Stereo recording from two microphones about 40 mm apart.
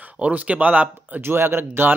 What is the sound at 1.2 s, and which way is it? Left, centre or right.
Speech, right.